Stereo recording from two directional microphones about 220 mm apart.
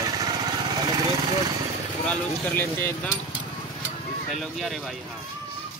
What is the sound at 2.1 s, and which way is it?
Speech, 5° left (ahead or behind).